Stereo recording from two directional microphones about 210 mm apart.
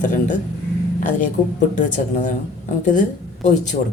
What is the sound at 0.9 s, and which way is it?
Speech, 35° left (ahead or behind).